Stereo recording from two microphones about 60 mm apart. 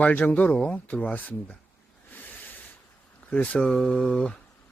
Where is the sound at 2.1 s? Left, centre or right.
Left.